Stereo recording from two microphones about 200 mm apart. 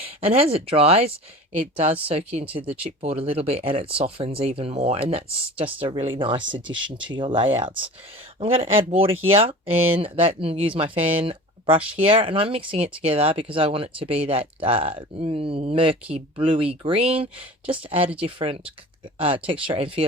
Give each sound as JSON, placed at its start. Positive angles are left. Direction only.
{"t": 0.0, "sound": "speech", "side_deg": -30}